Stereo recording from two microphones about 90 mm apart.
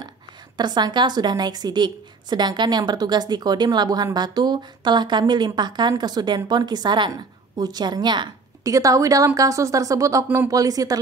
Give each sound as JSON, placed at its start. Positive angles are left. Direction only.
{"t": 0.6, "sound": "a woman's voice", "side_deg": -55}
{"t": 8.6, "sound": "a woman's voice", "side_deg": -40}
{"t": 10.2, "sound": "speech", "side_deg": -20}
{"t": 10.5, "sound": "a woman's voice", "side_deg": -40}